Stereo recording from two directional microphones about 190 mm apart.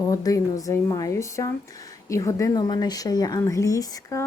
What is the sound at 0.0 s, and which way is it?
Speech, 20° left (ahead or behind).